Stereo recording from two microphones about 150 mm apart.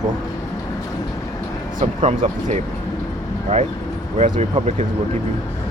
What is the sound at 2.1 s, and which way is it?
Speech, 50° right (ahead or behind).